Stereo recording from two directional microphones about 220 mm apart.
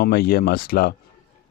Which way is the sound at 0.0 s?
45° left (ahead or behind).